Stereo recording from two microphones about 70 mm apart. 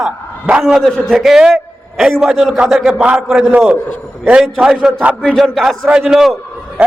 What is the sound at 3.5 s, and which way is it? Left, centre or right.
A man's voice, right.